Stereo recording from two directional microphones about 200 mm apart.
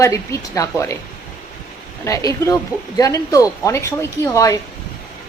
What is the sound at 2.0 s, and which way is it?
Speech, 15° left (ahead or behind).